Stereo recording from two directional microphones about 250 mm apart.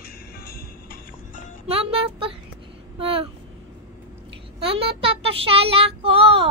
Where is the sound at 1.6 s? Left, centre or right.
Right.